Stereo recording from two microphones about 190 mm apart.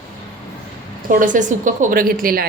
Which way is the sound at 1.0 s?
45° right (ahead or behind).